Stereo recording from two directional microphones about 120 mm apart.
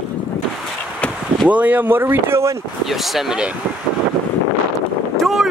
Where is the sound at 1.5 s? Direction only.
15° right (ahead or behind).